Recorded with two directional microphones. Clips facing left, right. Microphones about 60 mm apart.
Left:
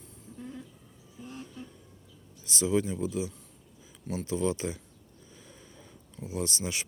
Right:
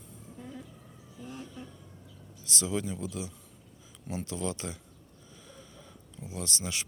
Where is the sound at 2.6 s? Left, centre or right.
Centre.